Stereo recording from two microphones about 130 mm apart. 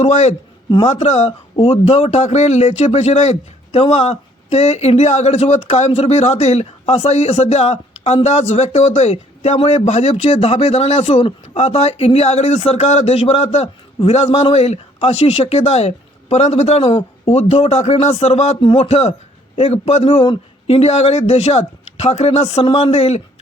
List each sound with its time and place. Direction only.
0.0 s a man's voice: 60° left (ahead or behind)